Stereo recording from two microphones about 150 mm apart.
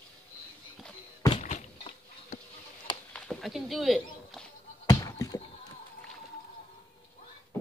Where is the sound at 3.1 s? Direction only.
5° left (ahead or behind).